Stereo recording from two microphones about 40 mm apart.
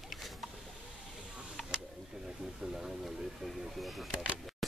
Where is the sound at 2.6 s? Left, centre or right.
Centre.